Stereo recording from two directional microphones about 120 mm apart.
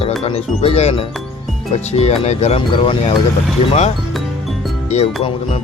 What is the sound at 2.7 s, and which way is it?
Speech, 45° left (ahead or behind).